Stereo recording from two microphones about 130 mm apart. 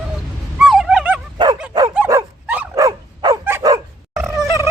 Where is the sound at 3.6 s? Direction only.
25° right (ahead or behind).